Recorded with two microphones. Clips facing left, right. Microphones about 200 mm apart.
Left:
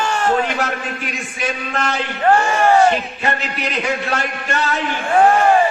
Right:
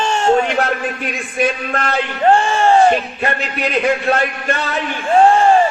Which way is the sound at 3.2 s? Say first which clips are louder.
Right 2 dB; 55° right (ahead or behind).